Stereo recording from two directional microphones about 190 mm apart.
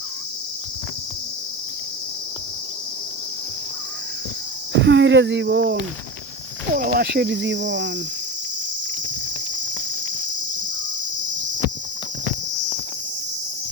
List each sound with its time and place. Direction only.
4.7 s speech: 70° right (ahead or behind)
6.7 s speech: 55° right (ahead or behind); by 7.9 s 70° right (ahead or behind)